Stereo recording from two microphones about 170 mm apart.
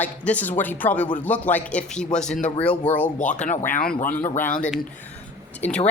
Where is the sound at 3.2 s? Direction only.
45° left (ahead or behind).